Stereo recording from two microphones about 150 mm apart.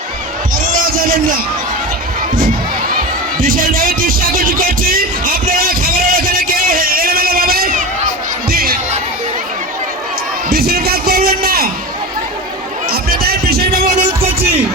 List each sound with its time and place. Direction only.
3.4 s music: 70° right (ahead or behind)
8.4 s music: 85° right
10.5 s music: 90° right
12.9 s music: 90° right